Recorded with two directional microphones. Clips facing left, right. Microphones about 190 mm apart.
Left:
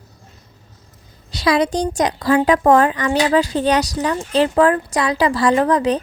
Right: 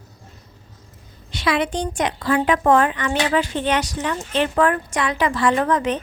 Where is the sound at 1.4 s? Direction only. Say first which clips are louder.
Left 4 dB; 40° left (ahead or behind).